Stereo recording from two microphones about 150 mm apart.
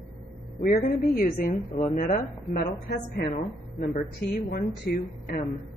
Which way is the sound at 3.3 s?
60° left (ahead or behind).